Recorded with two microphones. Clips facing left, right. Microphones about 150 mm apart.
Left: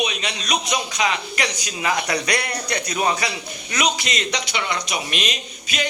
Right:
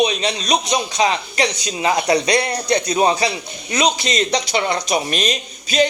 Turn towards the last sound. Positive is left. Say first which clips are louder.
# right 9 dB
turn(degrees=-35)  # may be behind; listen again after turning